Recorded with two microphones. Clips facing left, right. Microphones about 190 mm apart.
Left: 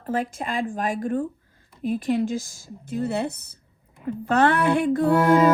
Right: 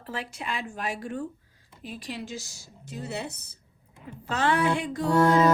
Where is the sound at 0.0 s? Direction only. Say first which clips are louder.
Left 9 dB; 50° left (ahead or behind).